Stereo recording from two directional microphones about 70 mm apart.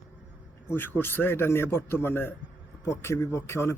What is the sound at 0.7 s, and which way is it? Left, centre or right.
A man's voice, left.